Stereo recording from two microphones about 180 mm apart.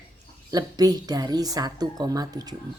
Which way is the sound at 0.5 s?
20° right (ahead or behind).